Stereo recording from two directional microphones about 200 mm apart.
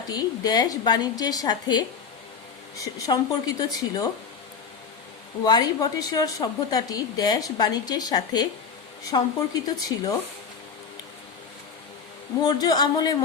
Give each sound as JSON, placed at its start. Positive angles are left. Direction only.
{"t": 0.1, "sound": "a woman's voice", "side_deg": 20}
{"t": 5.4, "sound": "a woman's voice", "side_deg": 20}
{"t": 12.5, "sound": "a woman's voice", "side_deg": 20}